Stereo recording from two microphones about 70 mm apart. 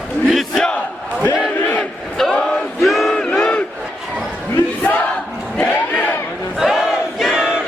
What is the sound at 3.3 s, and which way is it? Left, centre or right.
Battle cry, centre.